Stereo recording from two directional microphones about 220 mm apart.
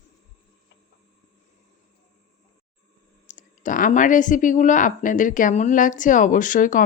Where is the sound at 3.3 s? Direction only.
35° left (ahead or behind).